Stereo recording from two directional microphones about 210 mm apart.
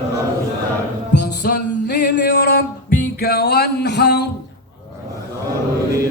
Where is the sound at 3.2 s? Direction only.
45° left (ahead or behind).